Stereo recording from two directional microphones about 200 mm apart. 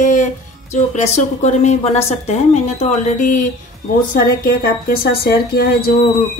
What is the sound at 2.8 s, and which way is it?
A woman's voice, 40° left (ahead or behind).